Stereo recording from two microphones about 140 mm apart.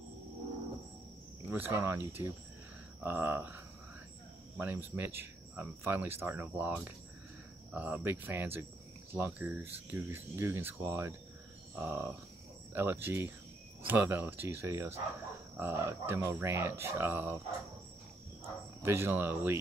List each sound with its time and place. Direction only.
1.5 s speech: 15° right (ahead or behind)
4.6 s speech: 15° right (ahead or behind)
18.8 s speech: 15° right (ahead or behind)